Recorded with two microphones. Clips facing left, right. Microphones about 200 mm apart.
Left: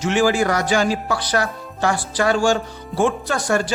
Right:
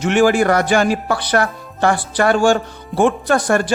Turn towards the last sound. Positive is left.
turn(degrees=-55)  # may be behind; listen again after turning